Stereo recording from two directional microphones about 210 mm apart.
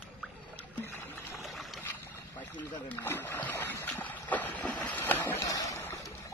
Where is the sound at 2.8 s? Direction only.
10° left (ahead or behind).